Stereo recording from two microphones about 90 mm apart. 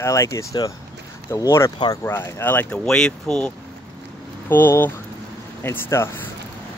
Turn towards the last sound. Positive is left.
turn(degrees=25)  # may be behind; listen again after turning